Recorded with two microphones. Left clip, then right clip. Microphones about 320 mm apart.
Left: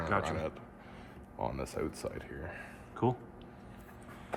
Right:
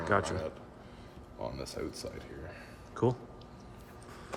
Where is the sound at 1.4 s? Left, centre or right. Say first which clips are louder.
Left 3 dB; centre.